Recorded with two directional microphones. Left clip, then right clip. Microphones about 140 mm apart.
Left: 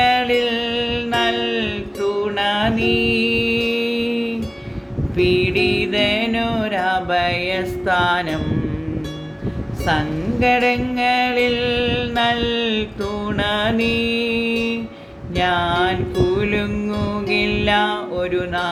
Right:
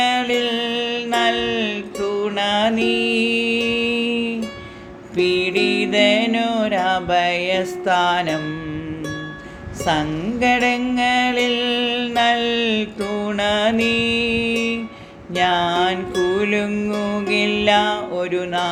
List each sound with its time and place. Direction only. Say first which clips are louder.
0.0 s music: left 2 dB; 35° right (ahead or behind)
5.1 s music: left 1 dB; 45° right (ahead or behind)
9.8 s music: even; 50° right (ahead or behind)